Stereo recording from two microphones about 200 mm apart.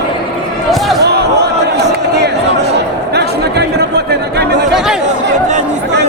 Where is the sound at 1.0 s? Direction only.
55° right (ahead or behind).